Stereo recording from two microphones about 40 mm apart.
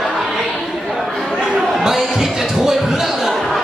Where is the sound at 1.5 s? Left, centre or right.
Centre.